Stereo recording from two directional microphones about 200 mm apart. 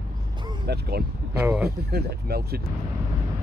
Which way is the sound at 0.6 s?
50° right (ahead or behind).